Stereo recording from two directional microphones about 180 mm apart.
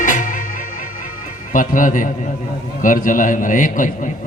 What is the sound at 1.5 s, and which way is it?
Speech, 45° left (ahead or behind).